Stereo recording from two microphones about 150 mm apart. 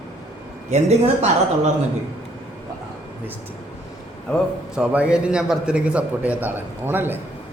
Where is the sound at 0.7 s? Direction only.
50° right (ahead or behind).